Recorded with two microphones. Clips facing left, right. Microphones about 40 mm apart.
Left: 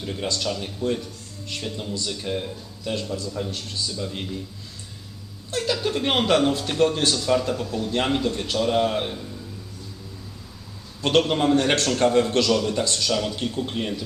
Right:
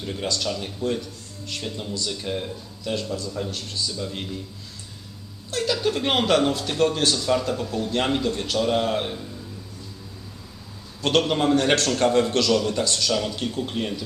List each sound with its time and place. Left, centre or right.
0.0 s a man's voice: centre
5.5 s a man's voice: centre
11.0 s a man's voice: centre